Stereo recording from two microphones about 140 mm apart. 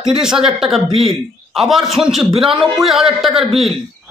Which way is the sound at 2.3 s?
40° right (ahead or behind).